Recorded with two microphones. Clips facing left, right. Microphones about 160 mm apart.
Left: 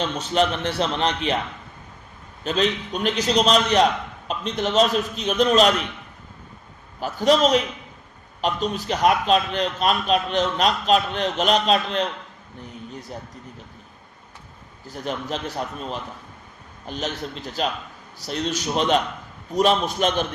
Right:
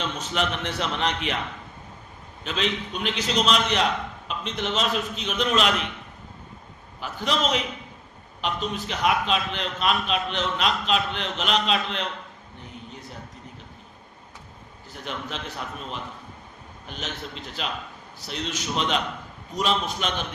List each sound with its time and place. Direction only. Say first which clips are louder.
0.0 s a man's voice: left 6 dB; 35° left (ahead or behind)
2.4 s a man's voice: left 5 dB; 40° left (ahead or behind)
7.0 s a man's voice: left 8 dB; 40° left (ahead or behind)
14.8 s a man's voice: left 6 dB; 40° left (ahead or behind)